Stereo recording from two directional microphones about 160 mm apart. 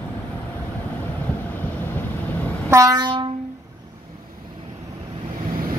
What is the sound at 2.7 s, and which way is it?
Train, 25° right (ahead or behind).